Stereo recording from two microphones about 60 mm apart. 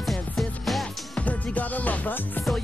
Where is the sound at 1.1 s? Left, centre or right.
Left.